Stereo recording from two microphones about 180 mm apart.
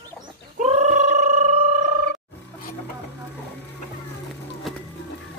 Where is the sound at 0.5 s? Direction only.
40° right (ahead or behind).